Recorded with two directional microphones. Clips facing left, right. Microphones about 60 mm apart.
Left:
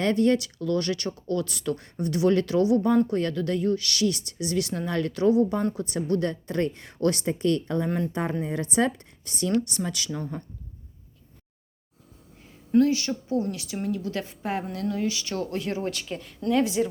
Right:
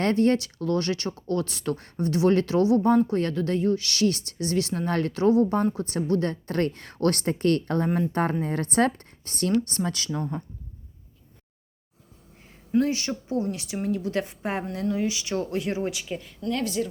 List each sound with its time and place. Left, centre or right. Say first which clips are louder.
0.0 s speech: even; right
6.5 s speech: right 1 dB; right
7.9 s speech: right 2 dB; centre
8.1 s a woman's voice: right 3 dB; right
9.6 s speech: right 2 dB; right
12.8 s speech: left 3 dB; right; by 16.4 s centre
16.5 s speech: left 4 dB; centre